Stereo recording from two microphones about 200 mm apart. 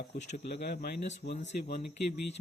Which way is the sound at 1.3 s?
35° left (ahead or behind).